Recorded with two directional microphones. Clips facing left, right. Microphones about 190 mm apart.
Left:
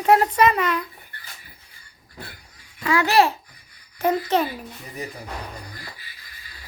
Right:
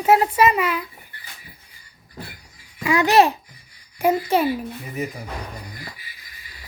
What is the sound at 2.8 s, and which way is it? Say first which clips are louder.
A child's voice: right 2 dB; 20° right (ahead or behind).